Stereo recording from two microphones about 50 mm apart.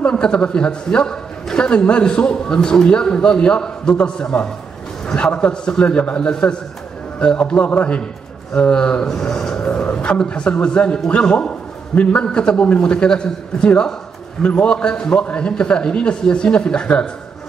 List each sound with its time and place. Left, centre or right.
0.0 s a man's voice: centre
9.6 s a man's voice: left